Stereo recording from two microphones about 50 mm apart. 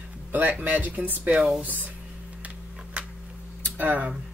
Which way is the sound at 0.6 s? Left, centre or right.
Right.